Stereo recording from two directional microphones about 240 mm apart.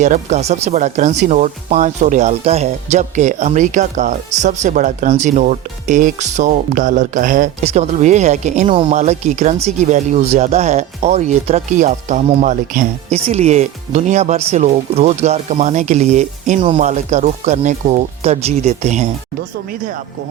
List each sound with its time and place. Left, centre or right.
0.0 s speech: right